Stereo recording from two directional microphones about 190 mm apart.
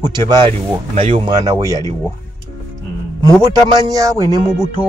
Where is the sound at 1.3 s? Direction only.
20° right (ahead or behind).